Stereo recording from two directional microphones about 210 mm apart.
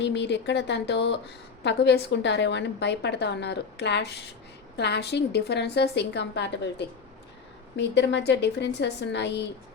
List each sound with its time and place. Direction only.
0.0 s a woman's voice: 55° left (ahead or behind)